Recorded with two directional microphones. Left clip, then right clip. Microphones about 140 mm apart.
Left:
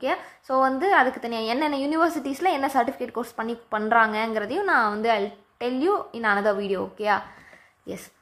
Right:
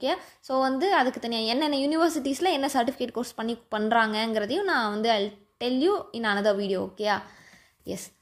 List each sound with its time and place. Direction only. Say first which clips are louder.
0.0 s a woman's voice: left 2 dB; 25° right (ahead or behind)